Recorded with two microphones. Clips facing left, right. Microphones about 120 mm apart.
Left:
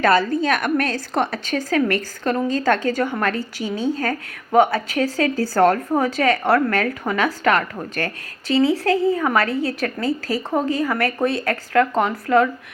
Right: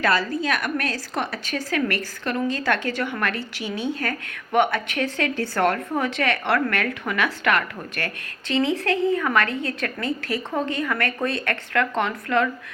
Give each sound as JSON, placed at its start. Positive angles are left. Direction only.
{"t": 0.0, "sound": "a woman's voice", "side_deg": 50}